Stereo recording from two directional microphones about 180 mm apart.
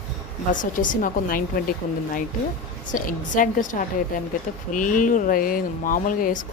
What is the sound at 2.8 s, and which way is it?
Speech, 50° left (ahead or behind).